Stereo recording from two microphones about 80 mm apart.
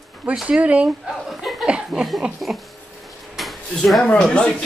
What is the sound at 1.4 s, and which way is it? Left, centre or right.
Chuckle, centre.